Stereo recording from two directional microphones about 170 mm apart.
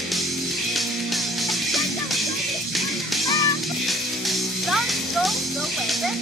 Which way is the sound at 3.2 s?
20° left (ahead or behind).